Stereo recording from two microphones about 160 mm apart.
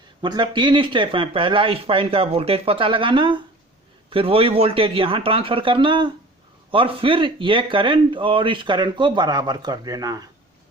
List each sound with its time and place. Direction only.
0.2 s speech: 30° right (ahead or behind)